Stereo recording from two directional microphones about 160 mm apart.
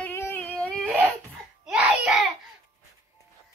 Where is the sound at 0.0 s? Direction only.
15° left (ahead or behind); by 2.3 s centre (ahead or behind).